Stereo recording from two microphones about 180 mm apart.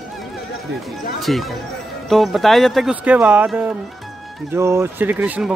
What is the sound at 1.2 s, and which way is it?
Speech, centre (ahead or behind).